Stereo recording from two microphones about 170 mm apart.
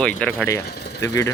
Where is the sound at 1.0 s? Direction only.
20° left (ahead or behind).